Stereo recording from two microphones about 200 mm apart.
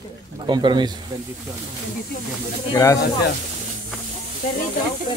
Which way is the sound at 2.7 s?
15° left (ahead or behind).